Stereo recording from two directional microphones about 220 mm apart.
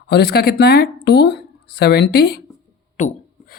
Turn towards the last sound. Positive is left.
turn(degrees=35)  # may be behind; listen again after turning